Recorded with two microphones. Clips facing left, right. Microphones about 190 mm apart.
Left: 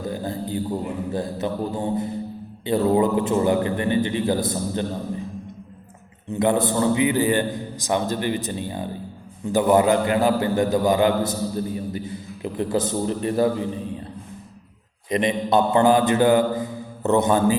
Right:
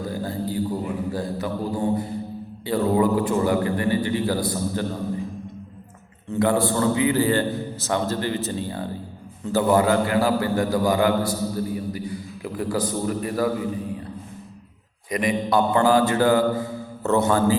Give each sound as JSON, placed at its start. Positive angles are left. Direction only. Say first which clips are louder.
{"t": 0.1, "sound": "a sound", "louder": "left 1 dB", "side_deg": 20}
{"t": 1.1, "sound": "a man's voice", "louder": "left 1 dB", "side_deg": 20}
{"t": 6.3, "sound": "a man's voice", "louder": "even", "side_deg": 20}
{"t": 15.1, "sound": "a man's voice", "louder": "left 2 dB", "side_deg": 25}